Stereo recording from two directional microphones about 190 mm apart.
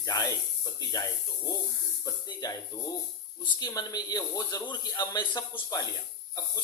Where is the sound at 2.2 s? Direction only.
20° left (ahead or behind).